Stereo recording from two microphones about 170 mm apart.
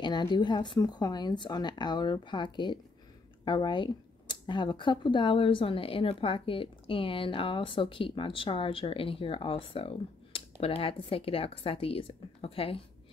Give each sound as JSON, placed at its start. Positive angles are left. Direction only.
{"t": 0.0, "sound": "speech", "side_deg": 25}